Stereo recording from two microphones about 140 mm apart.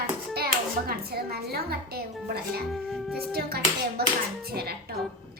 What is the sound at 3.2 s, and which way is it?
Speech, 90° right.